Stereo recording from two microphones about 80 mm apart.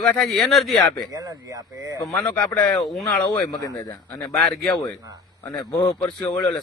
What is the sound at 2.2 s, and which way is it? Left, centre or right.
Speech, centre.